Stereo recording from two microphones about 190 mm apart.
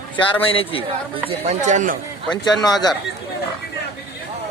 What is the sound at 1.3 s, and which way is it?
Speech, 35° right (ahead or behind).